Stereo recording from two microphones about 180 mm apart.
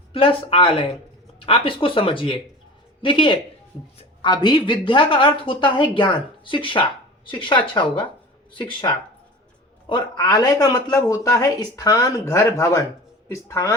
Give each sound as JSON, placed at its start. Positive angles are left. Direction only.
{"t": 0.1, "sound": "a man's voice", "side_deg": 30}